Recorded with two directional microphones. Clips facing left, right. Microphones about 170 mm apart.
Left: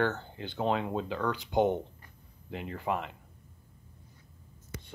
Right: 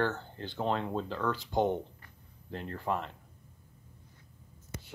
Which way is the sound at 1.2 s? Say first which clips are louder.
Left 1 dB; centre (ahead or behind).